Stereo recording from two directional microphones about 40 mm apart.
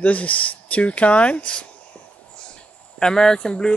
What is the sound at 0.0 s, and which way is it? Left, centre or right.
Speech, left.